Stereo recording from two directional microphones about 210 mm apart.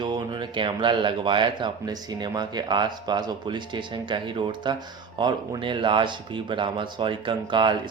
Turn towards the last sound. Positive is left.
turn(degrees=-20)  # may be behind; listen again after turning